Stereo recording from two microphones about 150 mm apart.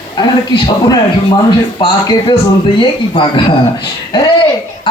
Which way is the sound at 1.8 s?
30° left (ahead or behind).